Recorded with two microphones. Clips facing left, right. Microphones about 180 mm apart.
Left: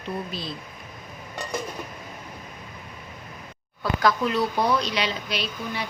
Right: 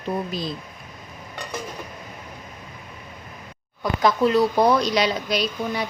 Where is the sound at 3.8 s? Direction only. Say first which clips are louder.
Right 2 dB; 15° right (ahead or behind).